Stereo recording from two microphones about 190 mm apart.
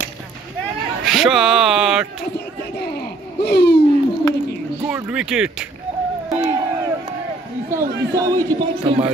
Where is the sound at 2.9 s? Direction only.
60° left (ahead or behind).